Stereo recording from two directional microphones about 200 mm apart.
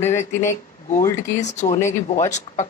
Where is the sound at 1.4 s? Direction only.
35° left (ahead or behind).